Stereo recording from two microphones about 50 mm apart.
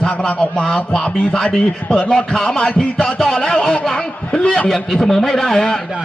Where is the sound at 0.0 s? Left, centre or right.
Centre.